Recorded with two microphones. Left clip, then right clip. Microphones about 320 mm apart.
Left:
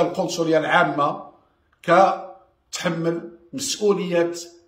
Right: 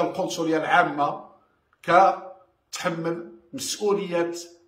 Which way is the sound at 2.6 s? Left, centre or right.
Centre.